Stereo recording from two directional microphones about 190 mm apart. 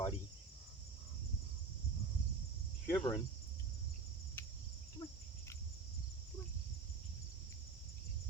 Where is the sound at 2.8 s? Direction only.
15° left (ahead or behind).